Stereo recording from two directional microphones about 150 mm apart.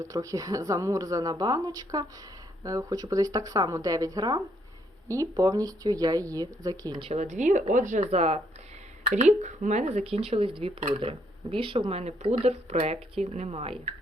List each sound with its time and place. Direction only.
0.0 s speech: 20° right (ahead or behind)
7.1 s speech: 50° right (ahead or behind)